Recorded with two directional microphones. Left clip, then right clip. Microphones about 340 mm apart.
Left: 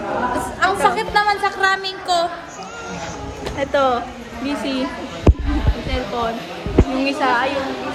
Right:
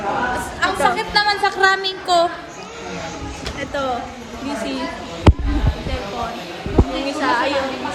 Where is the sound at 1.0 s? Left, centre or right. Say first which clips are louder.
Left 1 dB; centre.